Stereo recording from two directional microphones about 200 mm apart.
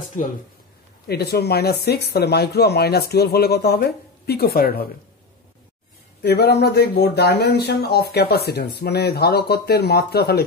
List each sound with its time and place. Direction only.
1.0 s speech: 50° left (ahead or behind)
6.2 s speech: 55° left (ahead or behind)